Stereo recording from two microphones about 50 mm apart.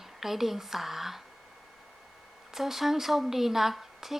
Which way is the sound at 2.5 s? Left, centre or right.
Centre.